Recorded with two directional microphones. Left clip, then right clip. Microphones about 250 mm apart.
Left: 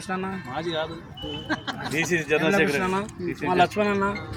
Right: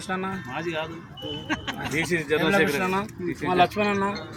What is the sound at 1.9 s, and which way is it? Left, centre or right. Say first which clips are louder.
Speech: left 1 dB; centre.